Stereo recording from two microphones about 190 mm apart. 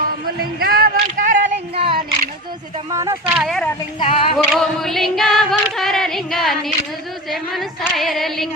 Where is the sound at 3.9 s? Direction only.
25° left (ahead or behind).